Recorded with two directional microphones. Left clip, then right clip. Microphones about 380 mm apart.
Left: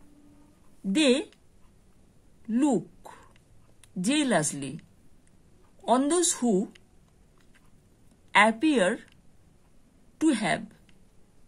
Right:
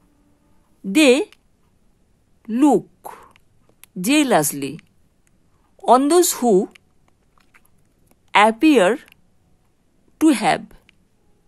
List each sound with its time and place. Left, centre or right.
0.9 s a woman's voice: right
2.4 s a sound: right
5.8 s a woman's voice: right
8.3 s a woman's voice: right